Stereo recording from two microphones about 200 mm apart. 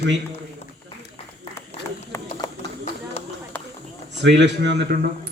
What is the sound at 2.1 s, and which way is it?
Clip-clop, 15° left (ahead or behind).